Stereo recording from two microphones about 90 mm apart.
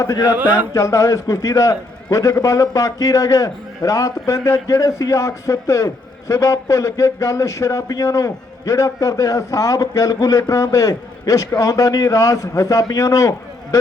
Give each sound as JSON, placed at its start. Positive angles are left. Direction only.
{"t": 0.0, "sound": "a man's voice", "side_deg": 40}
{"t": 0.3, "sound": "speech", "side_deg": -20}
{"t": 0.7, "sound": "a man's voice", "side_deg": 35}